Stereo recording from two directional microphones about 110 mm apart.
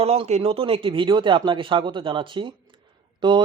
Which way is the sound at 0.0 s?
65° right (ahead or behind).